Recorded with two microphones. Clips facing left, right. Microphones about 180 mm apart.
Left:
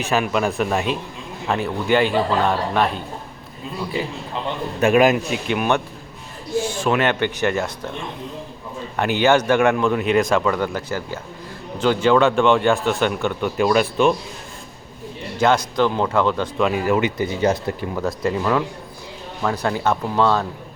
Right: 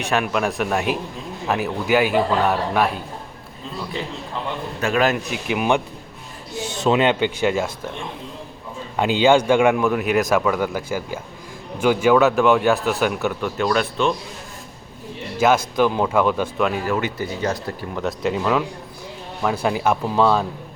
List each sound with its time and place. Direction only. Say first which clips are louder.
0.0 s speech: left 1 dB; centre (ahead or behind)
4.8 s speech: left 5 dB; 15° left (ahead or behind)
5.3 s speech: even; 10° right (ahead or behind)
9.0 s speech: right 1 dB; 15° right (ahead or behind)
13.6 s speech: left 4 dB; 10° left (ahead or behind)
15.4 s speech: right 1 dB; 5° right (ahead or behind)
16.6 s speech: left 7 dB; 10° left (ahead or behind)
17.9 s speech: right 1 dB; centre (ahead or behind)